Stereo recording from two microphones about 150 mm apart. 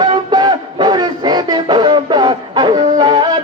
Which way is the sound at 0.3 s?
25° right (ahead or behind).